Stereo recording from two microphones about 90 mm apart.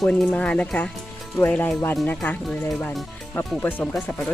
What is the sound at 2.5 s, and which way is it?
Speech, 5° left (ahead or behind).